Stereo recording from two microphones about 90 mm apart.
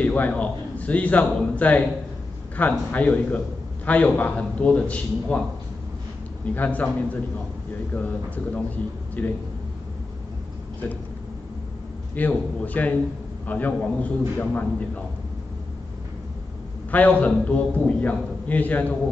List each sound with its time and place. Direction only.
0.0 s a man's voice: 15° left (ahead or behind)
6.4 s a man's voice: 20° left (ahead or behind)
9.2 s a man's voice: 15° left (ahead or behind)
12.2 s a man's voice: 20° left (ahead or behind)
16.9 s a man's voice: 15° left (ahead or behind)